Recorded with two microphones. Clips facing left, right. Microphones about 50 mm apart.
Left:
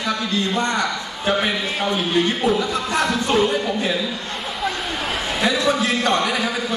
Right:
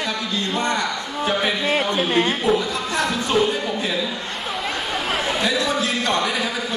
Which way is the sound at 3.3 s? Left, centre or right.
Centre.